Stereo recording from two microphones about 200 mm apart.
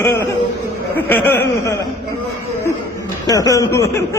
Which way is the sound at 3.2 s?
15° left (ahead or behind).